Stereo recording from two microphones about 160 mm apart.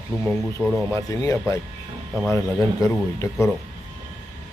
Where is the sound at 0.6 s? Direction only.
5° right (ahead or behind).